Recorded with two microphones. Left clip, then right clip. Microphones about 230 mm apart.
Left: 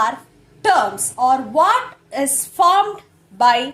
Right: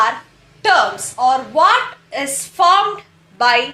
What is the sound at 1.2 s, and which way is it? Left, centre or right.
A woman's voice, left.